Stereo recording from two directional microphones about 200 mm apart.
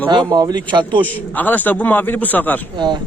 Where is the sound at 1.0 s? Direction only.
10° left (ahead or behind).